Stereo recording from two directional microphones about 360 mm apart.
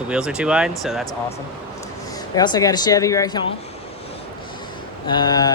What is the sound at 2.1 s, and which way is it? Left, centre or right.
Speech, centre.